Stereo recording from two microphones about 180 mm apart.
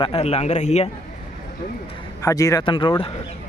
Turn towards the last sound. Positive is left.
turn(degrees=30)  # may be behind; listen again after turning